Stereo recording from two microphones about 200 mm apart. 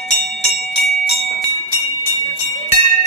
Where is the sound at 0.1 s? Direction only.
35° left (ahead or behind).